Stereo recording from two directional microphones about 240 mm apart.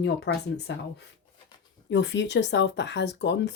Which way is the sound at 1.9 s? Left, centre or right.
Left.